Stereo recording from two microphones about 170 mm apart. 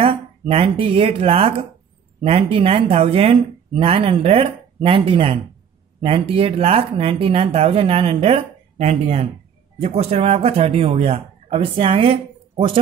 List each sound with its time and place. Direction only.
0.0 s speech: 35° right (ahead or behind)
2.5 s speech: 35° right (ahead or behind)